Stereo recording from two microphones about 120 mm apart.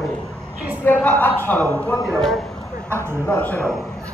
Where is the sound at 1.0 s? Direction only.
15° left (ahead or behind).